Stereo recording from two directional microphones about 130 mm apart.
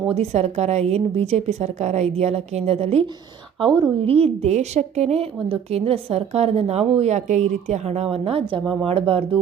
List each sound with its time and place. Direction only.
0.1 s a woman's voice: 55° right (ahead or behind)
3.6 s a woman's voice: 40° right (ahead or behind)
4.0 s a woman's voice: 50° right (ahead or behind)